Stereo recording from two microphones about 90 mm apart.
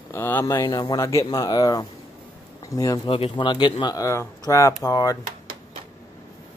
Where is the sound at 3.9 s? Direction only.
40° left (ahead or behind).